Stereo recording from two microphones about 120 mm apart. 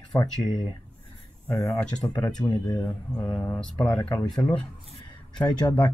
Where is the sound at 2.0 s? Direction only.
10° left (ahead or behind).